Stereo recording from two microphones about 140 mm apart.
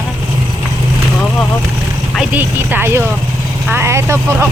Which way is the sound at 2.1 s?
5° right (ahead or behind).